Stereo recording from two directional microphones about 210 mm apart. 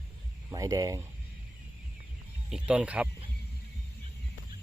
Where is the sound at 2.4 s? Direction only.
5° right (ahead or behind).